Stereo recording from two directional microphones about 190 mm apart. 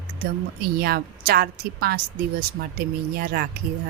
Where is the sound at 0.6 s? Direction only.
55° right (ahead or behind).